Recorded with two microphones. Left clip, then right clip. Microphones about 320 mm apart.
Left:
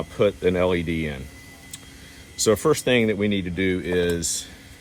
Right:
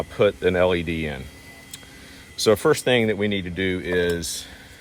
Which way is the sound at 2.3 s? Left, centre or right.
Right.